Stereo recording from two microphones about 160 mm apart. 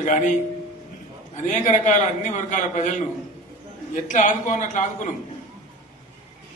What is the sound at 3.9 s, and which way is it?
A man's voice, 50° left (ahead or behind).